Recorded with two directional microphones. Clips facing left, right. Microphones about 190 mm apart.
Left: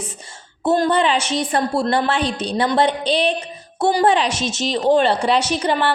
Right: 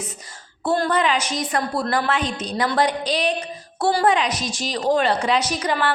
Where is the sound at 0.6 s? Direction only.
20° left (ahead or behind).